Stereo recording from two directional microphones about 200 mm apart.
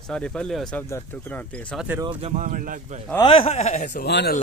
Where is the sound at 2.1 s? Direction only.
35° right (ahead or behind).